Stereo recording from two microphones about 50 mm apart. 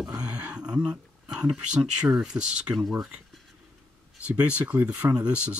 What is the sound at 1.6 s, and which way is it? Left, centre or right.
Speech, centre.